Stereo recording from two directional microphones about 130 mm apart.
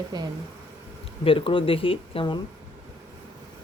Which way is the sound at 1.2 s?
45° left (ahead or behind).